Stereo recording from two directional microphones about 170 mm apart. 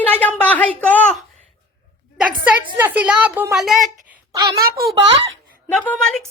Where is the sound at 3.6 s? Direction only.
Centre (ahead or behind).